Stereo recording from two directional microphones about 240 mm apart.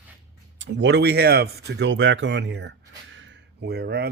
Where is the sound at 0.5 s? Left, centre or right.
Right.